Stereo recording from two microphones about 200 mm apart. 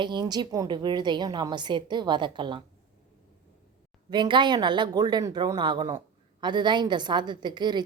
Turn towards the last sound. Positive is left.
turn(degrees=-20)  # may be behind; listen again after turning